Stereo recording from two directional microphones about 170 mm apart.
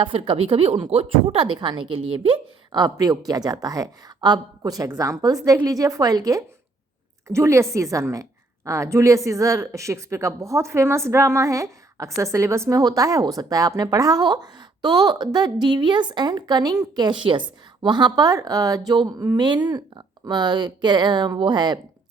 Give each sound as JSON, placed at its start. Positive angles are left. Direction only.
{"t": 0.0, "sound": "a woman's voice", "side_deg": -30}